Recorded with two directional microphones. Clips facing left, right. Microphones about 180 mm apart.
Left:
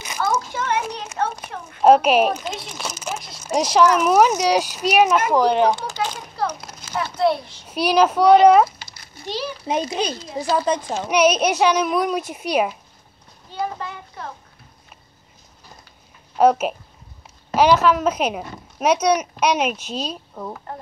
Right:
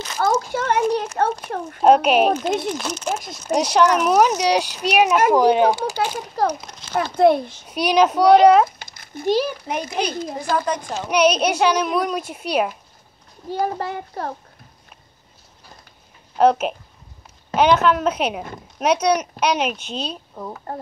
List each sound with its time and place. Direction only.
0.2 s a sound: 50° right (ahead or behind)
1.8 s a woman's voice: centre (ahead or behind)
2.2 s a child's voice: 50° right (ahead or behind)
2.8 s a woman's voice: 5° left (ahead or behind)
4.9 s speech: 5° right (ahead or behind)
6.1 s a child's voice: 40° right (ahead or behind)
6.6 s a sound: 5° left (ahead or behind)
7.0 s a child's voice: 50° right (ahead or behind)
7.6 s a woman's voice: 5° left (ahead or behind)
8.6 s a sound: 50° right (ahead or behind)
9.7 s a child's voice: 20° left (ahead or behind)
11.1 s a woman's voice: 5° left (ahead or behind)
13.5 s a child's voice: 45° right (ahead or behind)
16.3 s a woman's voice: 5° left (ahead or behind)